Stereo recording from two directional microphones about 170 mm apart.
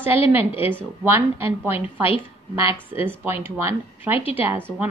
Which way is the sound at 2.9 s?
10° right (ahead or behind).